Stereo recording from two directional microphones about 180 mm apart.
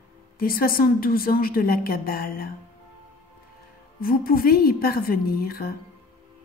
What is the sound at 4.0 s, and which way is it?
A woman's voice, 55° left (ahead or behind).